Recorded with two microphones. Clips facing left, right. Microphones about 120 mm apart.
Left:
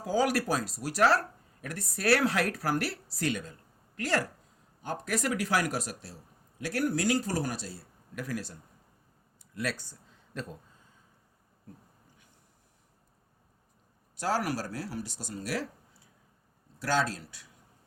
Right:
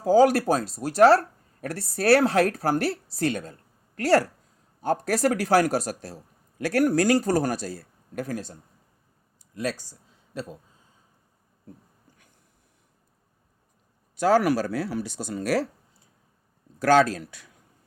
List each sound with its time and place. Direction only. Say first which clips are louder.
0.0 s speech: right 10 dB; 30° right (ahead or behind); by 7.7 s 45° right (ahead or behind)
8.1 s speech: right 5 dB; 30° right (ahead or behind)
9.7 s speech: even; 15° right (ahead or behind)
14.2 s speech: right 10 dB; 70° right (ahead or behind)
16.9 s speech: right 10 dB; 70° right (ahead or behind)